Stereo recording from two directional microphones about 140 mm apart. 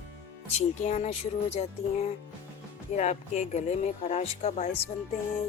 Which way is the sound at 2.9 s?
55° left (ahead or behind).